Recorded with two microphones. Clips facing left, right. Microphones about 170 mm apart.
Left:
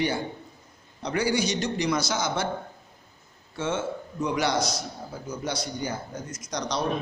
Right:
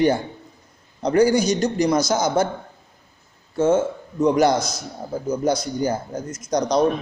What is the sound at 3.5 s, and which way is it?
A man's voice, 40° right (ahead or behind).